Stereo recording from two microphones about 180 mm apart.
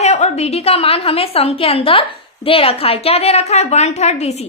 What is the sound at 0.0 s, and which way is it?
A woman's voice, 40° left (ahead or behind).